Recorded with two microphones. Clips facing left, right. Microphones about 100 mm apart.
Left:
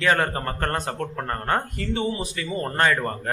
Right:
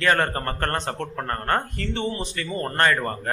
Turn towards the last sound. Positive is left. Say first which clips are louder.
# even
turn(degrees=0)  # may be behind; listen again after turning